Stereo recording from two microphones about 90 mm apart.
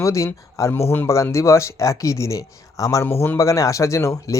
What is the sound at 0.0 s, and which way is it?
Speech, 35° left (ahead or behind).